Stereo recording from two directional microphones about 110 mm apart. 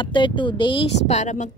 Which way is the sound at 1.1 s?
90° left.